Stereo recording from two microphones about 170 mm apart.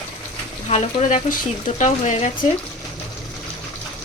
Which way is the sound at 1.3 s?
50° left (ahead or behind).